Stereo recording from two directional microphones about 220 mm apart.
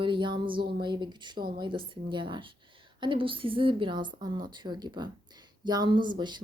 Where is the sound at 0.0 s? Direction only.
20° right (ahead or behind).